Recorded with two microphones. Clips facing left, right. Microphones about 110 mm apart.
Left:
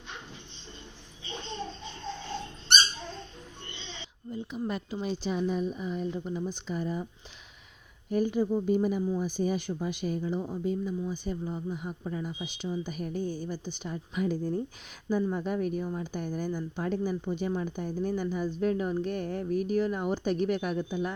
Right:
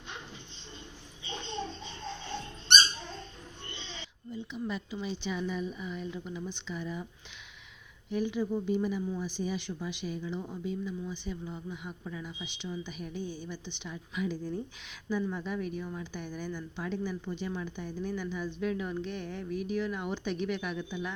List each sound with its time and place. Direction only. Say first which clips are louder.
4.3 s a woman's voice: left 3 dB; 50° left (ahead or behind)
8.1 s speech: left 4 dB; 45° left (ahead or behind)